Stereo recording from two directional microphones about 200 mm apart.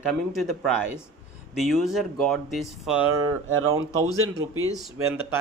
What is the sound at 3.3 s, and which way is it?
Speech, 90° right.